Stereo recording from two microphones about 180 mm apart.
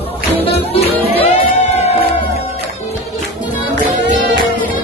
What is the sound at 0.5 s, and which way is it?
Music, 35° left (ahead or behind).